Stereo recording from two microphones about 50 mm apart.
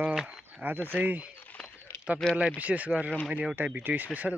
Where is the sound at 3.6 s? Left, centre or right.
Right.